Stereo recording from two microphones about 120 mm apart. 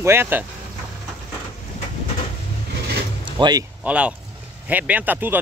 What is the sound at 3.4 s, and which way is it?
Speech, 35° right (ahead or behind).